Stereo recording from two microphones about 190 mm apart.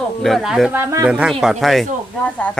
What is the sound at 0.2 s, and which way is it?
Speech, centre (ahead or behind).